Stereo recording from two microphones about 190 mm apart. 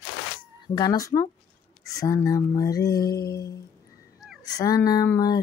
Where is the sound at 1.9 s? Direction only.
20° left (ahead or behind).